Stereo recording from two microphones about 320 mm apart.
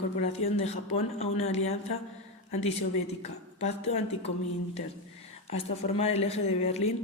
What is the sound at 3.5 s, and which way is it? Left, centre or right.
Speech, centre.